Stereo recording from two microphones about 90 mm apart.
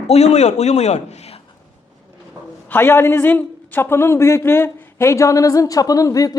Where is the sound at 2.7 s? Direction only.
25° left (ahead or behind).